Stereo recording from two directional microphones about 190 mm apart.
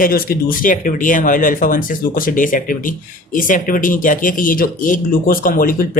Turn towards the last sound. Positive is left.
turn(degrees=45)  # may be behind; listen again after turning